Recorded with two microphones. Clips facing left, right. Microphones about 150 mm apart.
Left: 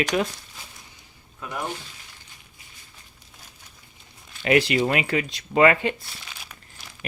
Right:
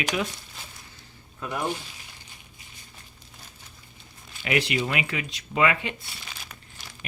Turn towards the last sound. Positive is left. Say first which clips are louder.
# even
turn(degrees=0)  # may be behind; listen again after turning